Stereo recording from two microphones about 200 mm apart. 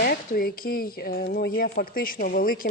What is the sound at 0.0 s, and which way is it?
Speech, 50° left (ahead or behind).